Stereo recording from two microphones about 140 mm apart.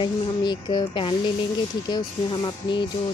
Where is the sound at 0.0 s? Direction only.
30° left (ahead or behind).